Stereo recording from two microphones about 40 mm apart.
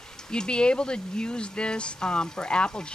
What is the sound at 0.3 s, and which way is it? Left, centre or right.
Speech, left.